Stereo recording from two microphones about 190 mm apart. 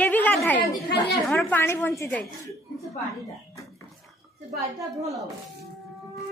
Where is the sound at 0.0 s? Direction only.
10° left (ahead or behind).